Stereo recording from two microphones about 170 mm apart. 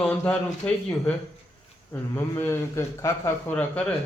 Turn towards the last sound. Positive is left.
turn(degrees=10)  # may be behind; listen again after turning